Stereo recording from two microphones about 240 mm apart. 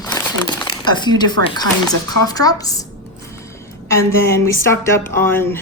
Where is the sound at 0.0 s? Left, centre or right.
Centre.